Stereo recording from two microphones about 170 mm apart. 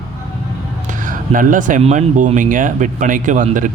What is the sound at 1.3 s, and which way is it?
Speech, 50° right (ahead or behind).